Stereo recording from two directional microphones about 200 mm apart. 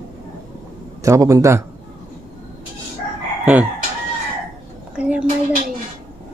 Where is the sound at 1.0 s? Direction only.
15° right (ahead or behind).